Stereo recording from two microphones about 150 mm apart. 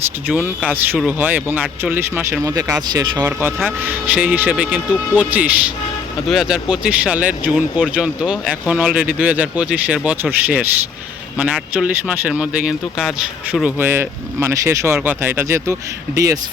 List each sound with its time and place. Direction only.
0.3 s speech: 10° right (ahead or behind)
2.9 s speech: 25° right (ahead or behind)
3.2 s speech: 10° right (ahead or behind)